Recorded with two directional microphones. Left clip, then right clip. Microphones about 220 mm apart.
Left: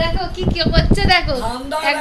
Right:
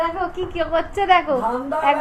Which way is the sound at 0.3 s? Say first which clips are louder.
Left 2 dB; 5° left (ahead or behind).